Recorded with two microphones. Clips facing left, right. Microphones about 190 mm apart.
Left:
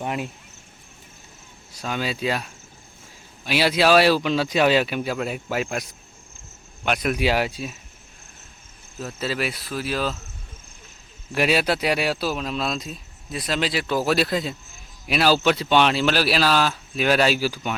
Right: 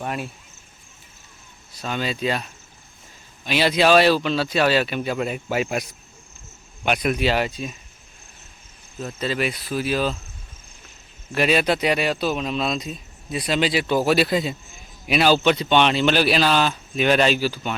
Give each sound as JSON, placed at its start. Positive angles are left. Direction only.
{"t": 0.0, "sound": "speech", "side_deg": 15}
{"t": 1.7, "sound": "speech", "side_deg": 10}
{"t": 7.2, "sound": "speech", "side_deg": 10}
{"t": 9.0, "sound": "speech", "side_deg": 5}
{"t": 11.3, "sound": "speech", "side_deg": 10}